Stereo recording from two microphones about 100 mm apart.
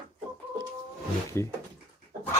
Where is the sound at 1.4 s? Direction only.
25° left (ahead or behind).